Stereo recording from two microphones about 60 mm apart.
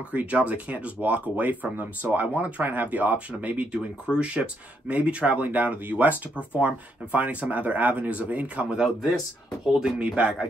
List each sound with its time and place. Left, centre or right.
0.1 s speech: right
8.8 s speech: centre